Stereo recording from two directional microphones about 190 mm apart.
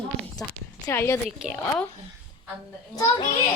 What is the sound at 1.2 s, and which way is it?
Speech, 5° right (ahead or behind).